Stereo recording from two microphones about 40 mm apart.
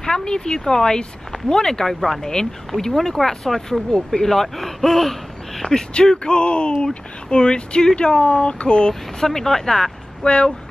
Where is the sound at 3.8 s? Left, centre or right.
Centre.